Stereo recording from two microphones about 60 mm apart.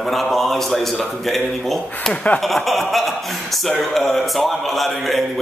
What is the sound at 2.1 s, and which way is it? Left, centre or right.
Speech, left.